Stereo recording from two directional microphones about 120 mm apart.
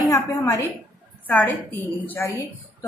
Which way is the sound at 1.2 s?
15° left (ahead or behind).